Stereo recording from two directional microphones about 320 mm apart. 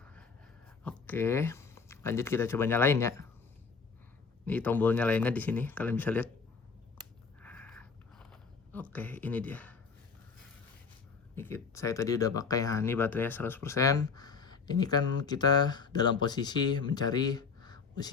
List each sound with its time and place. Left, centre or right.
0.0 s dog: centre
0.9 s speech: centre
4.4 s speech: centre
7.4 s biting: centre
11.3 s speech: centre